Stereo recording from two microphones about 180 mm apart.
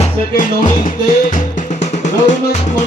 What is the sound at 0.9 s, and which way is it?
Music, 45° left (ahead or behind).